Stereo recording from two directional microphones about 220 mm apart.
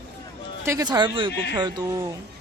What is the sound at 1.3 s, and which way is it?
Speech, 50° left (ahead or behind).